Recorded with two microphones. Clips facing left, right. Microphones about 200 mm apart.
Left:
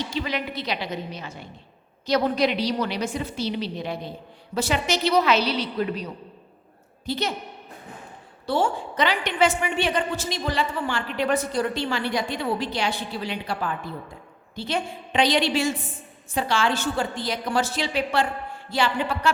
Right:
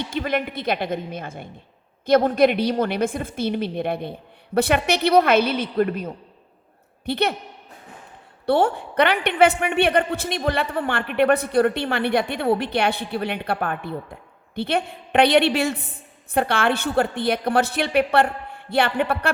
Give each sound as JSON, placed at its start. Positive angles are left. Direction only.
{"t": 0.0, "sound": "a woman's voice", "side_deg": -55}
{"t": 7.0, "sound": "a woman's voice", "side_deg": -60}
{"t": 8.4, "sound": "a woman's voice", "side_deg": -60}